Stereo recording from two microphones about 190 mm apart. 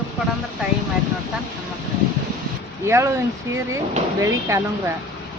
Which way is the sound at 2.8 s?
15° right (ahead or behind).